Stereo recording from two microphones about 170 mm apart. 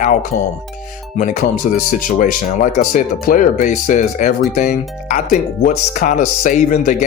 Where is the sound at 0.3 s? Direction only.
60° left (ahead or behind).